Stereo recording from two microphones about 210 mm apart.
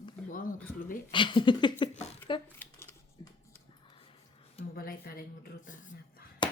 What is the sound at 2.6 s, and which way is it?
Shuffling cards, 10° left (ahead or behind).